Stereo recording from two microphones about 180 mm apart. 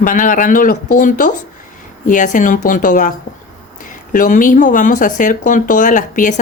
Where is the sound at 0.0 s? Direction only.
50° left (ahead or behind).